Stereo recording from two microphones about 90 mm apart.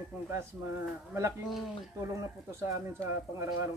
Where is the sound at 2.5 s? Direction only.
30° right (ahead or behind).